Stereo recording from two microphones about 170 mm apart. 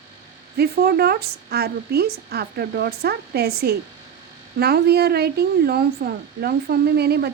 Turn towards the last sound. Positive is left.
turn(degrees=-70)  # may be behind; listen again after turning